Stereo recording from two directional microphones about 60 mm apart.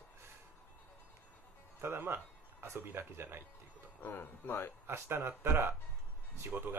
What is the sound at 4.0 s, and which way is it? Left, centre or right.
Speech, left.